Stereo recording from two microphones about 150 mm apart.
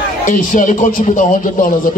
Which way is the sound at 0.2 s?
60° left (ahead or behind).